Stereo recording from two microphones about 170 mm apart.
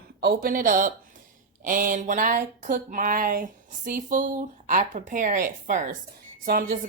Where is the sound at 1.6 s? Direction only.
50° right (ahead or behind).